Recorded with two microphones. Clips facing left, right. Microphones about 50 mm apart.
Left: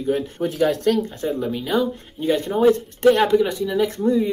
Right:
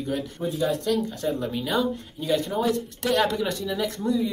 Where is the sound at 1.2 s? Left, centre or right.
Centre.